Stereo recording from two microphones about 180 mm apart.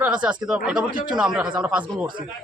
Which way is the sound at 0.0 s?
5° right (ahead or behind).